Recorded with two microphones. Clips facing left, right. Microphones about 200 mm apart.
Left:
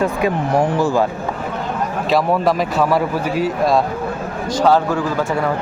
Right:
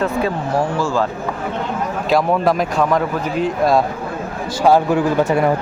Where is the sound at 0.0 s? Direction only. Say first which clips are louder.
Left 1 dB; 15° left (ahead or behind).